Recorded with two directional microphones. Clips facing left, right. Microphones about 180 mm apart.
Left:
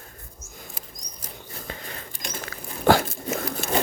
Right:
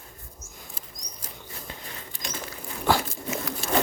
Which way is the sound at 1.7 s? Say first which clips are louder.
Left 7 dB; 70° left (ahead or behind).